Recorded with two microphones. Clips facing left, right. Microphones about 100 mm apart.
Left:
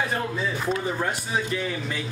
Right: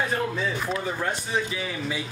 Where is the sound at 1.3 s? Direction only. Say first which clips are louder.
Left 1 dB; centre (ahead or behind).